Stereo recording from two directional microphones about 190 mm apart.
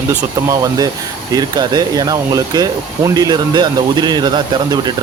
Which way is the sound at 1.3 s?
20° right (ahead or behind).